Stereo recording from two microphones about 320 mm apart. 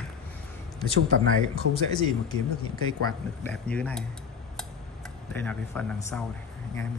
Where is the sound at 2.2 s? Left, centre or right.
Left.